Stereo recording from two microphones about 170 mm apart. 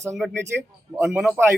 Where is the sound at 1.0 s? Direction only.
5° right (ahead or behind).